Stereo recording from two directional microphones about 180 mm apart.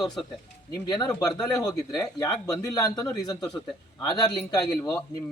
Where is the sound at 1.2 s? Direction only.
20° left (ahead or behind).